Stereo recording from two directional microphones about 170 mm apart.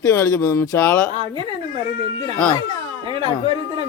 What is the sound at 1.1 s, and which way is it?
Speech, 30° right (ahead or behind).